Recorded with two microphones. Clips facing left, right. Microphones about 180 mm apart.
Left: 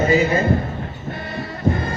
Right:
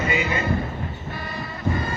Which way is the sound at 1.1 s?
55° left (ahead or behind).